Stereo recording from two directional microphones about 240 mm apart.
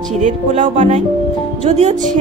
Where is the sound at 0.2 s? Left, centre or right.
Right.